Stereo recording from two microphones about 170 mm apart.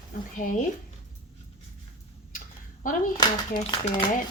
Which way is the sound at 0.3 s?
50° left (ahead or behind).